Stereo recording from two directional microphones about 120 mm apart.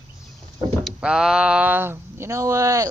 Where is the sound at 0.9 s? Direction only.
5° right (ahead or behind).